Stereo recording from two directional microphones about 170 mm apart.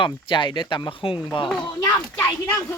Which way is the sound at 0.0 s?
30° left (ahead or behind).